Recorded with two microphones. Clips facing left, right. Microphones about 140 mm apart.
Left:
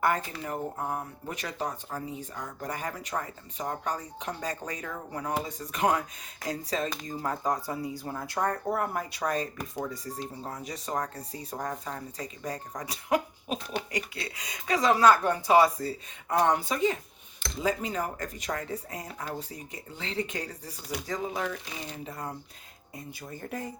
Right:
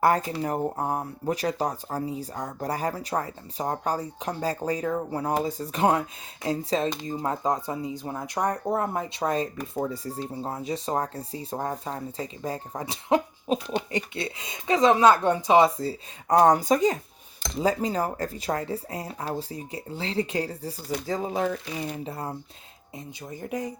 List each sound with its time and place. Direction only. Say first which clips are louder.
0.0 s speech: right 6 dB; 35° right (ahead or behind)
16.4 s speech: right 6 dB; 40° right (ahead or behind)
23.0 s speech: right 3 dB; 15° right (ahead or behind)